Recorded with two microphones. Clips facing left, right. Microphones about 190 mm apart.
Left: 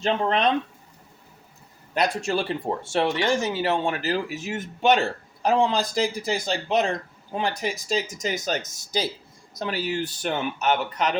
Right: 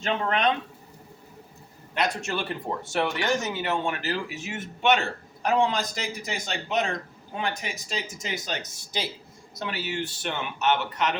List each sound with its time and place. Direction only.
0.0 s speech: 30° left (ahead or behind)
2.0 s speech: 35° left (ahead or behind)